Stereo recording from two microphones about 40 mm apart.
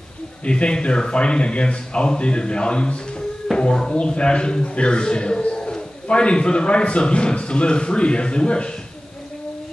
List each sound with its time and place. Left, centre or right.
0.5 s a man's voice: left